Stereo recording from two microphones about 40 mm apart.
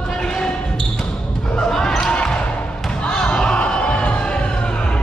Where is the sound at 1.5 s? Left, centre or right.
Centre.